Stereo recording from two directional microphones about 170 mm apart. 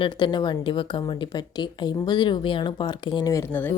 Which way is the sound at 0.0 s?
25° left (ahead or behind).